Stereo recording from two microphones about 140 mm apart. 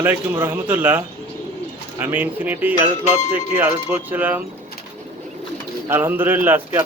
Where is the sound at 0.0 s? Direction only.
15° right (ahead or behind).